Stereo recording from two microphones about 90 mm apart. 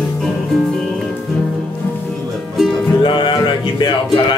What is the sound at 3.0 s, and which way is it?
Music, 60° left (ahead or behind).